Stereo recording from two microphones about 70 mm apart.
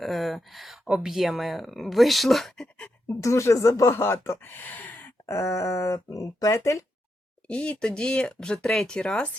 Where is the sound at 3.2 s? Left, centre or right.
Left.